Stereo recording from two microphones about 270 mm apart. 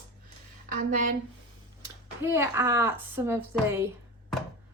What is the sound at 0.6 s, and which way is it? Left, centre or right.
Speech, right.